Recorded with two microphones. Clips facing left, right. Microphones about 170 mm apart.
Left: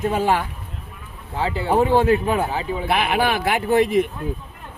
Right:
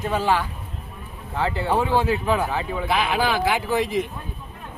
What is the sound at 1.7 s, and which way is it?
Speech, 50° left (ahead or behind).